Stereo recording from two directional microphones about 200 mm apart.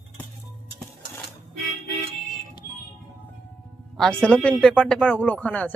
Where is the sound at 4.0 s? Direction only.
5° left (ahead or behind).